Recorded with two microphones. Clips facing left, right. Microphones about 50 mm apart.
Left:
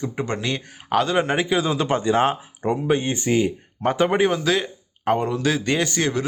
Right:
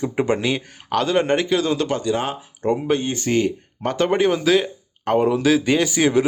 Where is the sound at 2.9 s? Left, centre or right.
Left.